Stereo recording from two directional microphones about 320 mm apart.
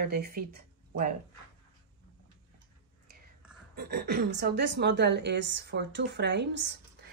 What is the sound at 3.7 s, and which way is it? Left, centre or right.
A woman's voice, right.